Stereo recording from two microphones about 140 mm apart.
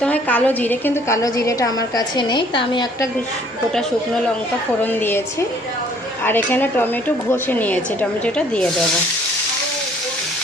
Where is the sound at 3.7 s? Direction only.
5° left (ahead or behind).